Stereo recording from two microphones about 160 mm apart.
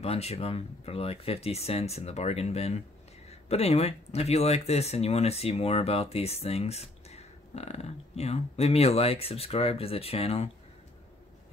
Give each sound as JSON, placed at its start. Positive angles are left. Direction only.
{"t": 0.0, "sound": "speech", "side_deg": 40}